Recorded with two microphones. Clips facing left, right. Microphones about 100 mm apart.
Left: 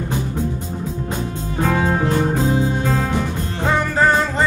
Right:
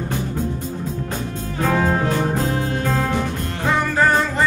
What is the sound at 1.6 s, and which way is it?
Music, 5° left (ahead or behind).